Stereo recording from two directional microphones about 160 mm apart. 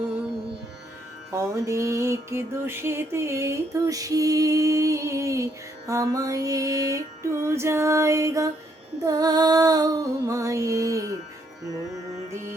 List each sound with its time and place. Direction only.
1.3 s music: 20° right (ahead or behind)
7.4 s female singing: 15° right (ahead or behind)
9.0 s music: 25° right (ahead or behind)